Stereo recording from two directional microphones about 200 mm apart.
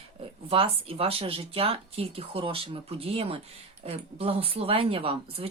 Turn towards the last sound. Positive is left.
turn(degrees=-30)  # may be behind; listen again after turning